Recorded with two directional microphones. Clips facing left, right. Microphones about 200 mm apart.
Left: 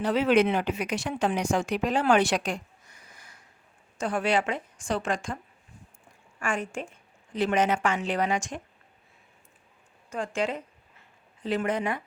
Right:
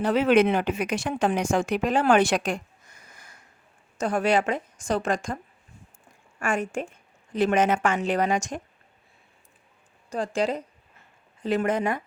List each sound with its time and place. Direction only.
0.0 s a woman's voice: 50° right (ahead or behind)
6.4 s a woman's voice: 45° right (ahead or behind)
10.1 s a woman's voice: 35° right (ahead or behind)